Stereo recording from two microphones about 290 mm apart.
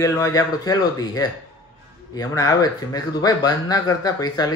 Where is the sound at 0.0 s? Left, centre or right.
Centre.